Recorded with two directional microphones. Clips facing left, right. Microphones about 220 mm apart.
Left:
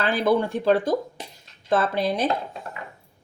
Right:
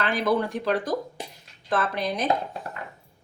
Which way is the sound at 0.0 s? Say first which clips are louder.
Left 3 dB; 30° left (ahead or behind).